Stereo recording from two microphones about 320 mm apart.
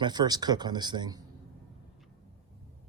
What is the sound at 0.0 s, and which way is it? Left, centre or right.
Speech, centre.